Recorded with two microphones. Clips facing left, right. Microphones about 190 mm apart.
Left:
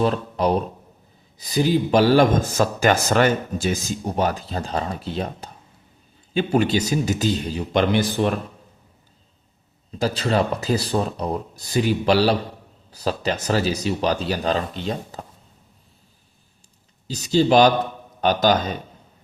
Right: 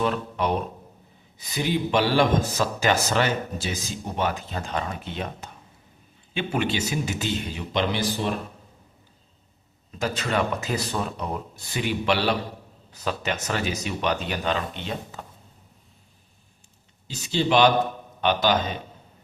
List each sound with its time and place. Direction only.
0.0 s speech: 35° left (ahead or behind); by 8.3 s 50° left (ahead or behind)
10.0 s speech: 35° left (ahead or behind)
17.1 s speech: 40° left (ahead or behind)